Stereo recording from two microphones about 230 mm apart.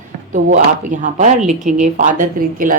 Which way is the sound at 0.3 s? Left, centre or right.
Right.